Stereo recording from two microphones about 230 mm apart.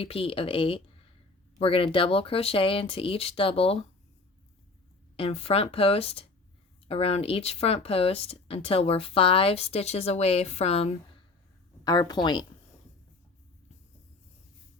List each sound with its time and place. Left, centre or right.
0.0 s speech: left
5.1 s speech: left